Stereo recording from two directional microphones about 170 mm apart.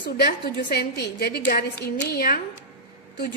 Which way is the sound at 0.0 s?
70° left (ahead or behind).